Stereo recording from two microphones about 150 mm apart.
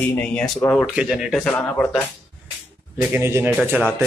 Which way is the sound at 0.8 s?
5° right (ahead or behind).